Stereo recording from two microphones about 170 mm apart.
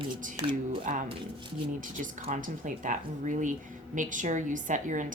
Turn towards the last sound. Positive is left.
turn(degrees=-50)  # may be behind; listen again after turning